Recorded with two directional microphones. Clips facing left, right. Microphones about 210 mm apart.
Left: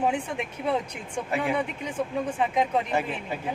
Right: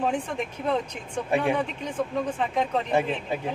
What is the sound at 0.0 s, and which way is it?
Speech, 10° left (ahead or behind).